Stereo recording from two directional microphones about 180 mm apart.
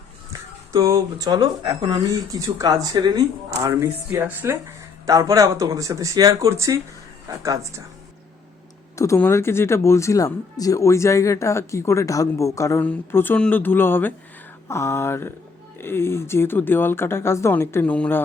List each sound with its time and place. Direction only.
0.7 s speech: 20° right (ahead or behind)
9.0 s speech: 15° left (ahead or behind)